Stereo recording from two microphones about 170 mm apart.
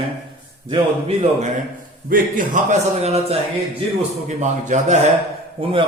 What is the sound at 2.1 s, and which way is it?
A man's voice, 45° right (ahead or behind).